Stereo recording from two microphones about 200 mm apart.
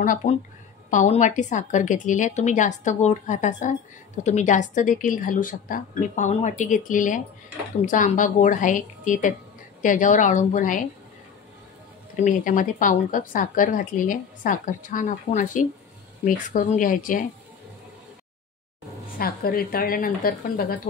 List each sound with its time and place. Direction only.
0.0 s speech: 40° left (ahead or behind)
12.2 s speech: 40° left (ahead or behind)
19.1 s a woman's voice: 50° left (ahead or behind)